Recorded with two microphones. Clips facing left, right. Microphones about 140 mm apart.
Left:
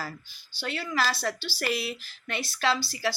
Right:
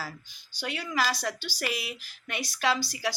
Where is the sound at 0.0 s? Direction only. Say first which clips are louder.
Left 2 dB; 15° right (ahead or behind).